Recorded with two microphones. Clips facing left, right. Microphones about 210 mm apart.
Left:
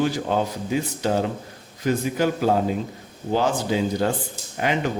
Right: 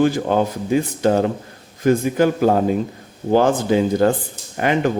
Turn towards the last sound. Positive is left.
turn(degrees=-55)  # may be behind; listen again after turning